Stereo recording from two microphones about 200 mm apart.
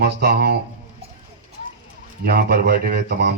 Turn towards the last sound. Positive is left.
turn(degrees=-50)  # may be behind; listen again after turning